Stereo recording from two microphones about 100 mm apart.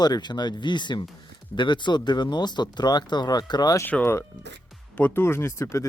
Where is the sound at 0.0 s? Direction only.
45° left (ahead or behind).